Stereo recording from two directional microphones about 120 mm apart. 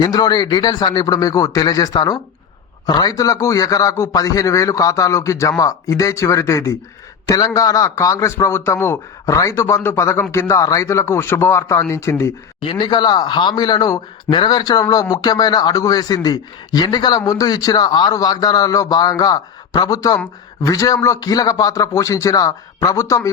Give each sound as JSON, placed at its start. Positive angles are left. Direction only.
{"t": 0.0, "sound": "a man's voice", "side_deg": 35}
{"t": 12.5, "sound": "a man's voice", "side_deg": 45}